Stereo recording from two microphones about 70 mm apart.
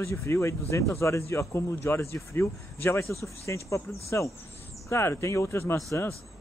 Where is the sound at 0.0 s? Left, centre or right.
Left.